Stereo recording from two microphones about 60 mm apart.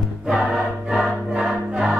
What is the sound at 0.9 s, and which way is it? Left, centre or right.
Choir, centre.